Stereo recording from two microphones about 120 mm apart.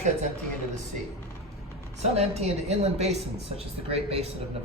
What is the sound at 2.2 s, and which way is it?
Speech, 60° right (ahead or behind).